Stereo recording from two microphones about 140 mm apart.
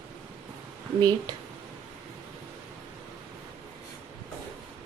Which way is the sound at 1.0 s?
30° right (ahead or behind).